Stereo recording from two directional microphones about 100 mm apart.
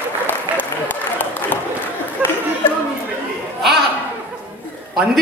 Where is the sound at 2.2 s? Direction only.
15° right (ahead or behind).